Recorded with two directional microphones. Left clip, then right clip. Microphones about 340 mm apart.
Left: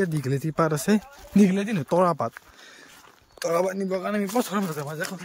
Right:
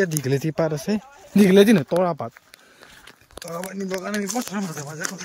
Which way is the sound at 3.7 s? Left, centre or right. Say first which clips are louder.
Left 1 dB; centre.